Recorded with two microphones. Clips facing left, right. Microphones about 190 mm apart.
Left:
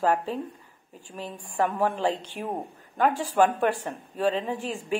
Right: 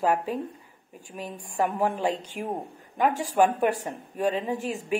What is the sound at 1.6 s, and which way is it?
Speech, 10° right (ahead or behind).